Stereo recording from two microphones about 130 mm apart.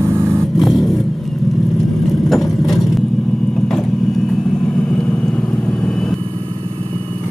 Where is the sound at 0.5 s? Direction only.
Centre (ahead or behind).